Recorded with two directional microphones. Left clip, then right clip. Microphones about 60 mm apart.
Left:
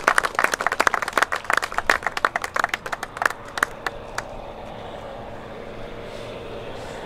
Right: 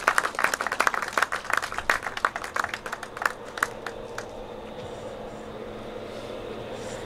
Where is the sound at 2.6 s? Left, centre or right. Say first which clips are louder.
Left 5 dB; left.